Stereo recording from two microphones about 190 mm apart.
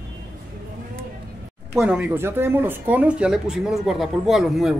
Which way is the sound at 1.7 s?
5° right (ahead or behind).